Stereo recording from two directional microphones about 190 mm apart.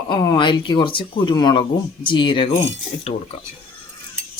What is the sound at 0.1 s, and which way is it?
Cutlery, 20° left (ahead or behind).